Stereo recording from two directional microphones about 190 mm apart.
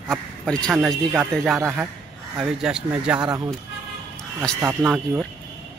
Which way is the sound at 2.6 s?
5° right (ahead or behind).